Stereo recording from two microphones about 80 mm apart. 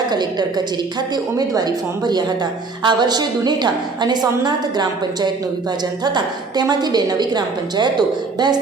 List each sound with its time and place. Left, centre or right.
0.1 s a woman's voice: right